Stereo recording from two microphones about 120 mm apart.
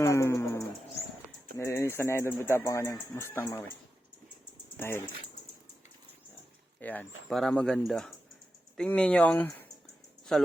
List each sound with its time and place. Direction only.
0.0 s a sound: 25° left (ahead or behind)
1.5 s speech: 20° left (ahead or behind)
4.8 s speech: 20° left (ahead or behind)
6.7 s speech: 15° left (ahead or behind)
7.3 s speech: 5° left (ahead or behind)